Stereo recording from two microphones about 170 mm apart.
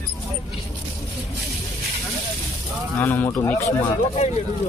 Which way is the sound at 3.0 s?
15° left (ahead or behind).